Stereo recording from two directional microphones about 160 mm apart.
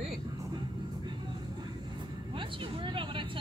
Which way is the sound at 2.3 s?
30° right (ahead or behind).